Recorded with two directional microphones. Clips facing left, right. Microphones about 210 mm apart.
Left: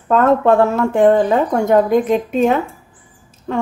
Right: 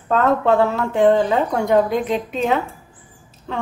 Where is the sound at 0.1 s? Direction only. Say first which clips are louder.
Left 4 dB; 50° left (ahead or behind).